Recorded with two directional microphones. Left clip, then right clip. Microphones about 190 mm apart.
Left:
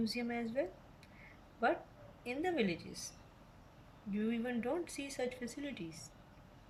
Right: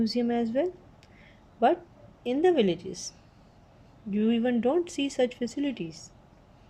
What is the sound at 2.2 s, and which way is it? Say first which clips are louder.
Speech: right 13 dB; 35° right (ahead or behind).